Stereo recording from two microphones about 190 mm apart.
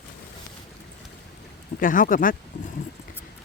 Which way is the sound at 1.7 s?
45° left (ahead or behind).